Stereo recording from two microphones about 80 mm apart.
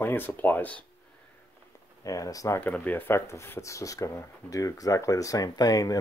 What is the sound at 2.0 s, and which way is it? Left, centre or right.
Speech, left.